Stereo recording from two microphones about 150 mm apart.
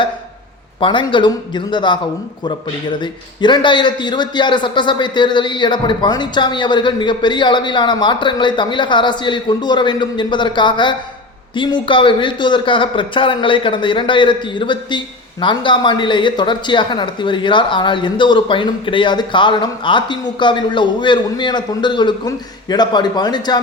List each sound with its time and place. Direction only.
0.8 s a man's voice: 35° left (ahead or behind)
3.0 s a man's voice: 30° left (ahead or behind)